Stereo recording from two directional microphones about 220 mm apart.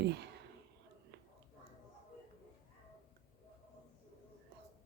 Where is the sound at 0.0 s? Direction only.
50° right (ahead or behind).